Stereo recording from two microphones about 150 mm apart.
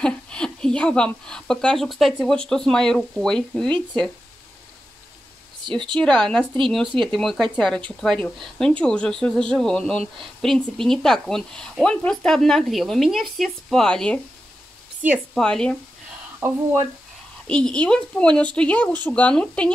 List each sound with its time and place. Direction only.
0.0 s speech: 5° left (ahead or behind)
5.6 s a woman's voice: 30° right (ahead or behind)
5.9 s speech: 5° left (ahead or behind)
15.3 s speech: 5° left (ahead or behind)
16.4 s speech: 15° right (ahead or behind)
17.5 s a woman's voice: 5° left (ahead or behind)